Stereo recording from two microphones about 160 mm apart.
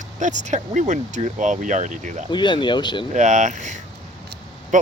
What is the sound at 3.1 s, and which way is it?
Speech, 50° right (ahead or behind).